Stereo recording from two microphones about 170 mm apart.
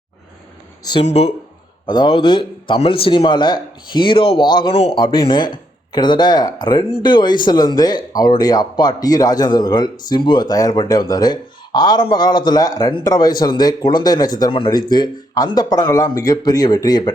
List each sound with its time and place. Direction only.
1.0 s speech: 35° left (ahead or behind)